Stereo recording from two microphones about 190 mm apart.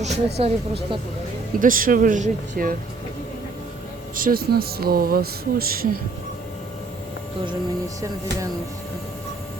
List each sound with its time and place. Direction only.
0.3 s speech: 30° right (ahead or behind)
1.5 s speech: 45° right (ahead or behind)
4.1 s speech: 50° right (ahead or behind)